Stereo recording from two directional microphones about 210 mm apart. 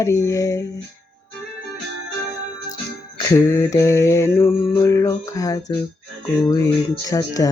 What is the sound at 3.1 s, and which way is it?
Mantra, 15° left (ahead or behind).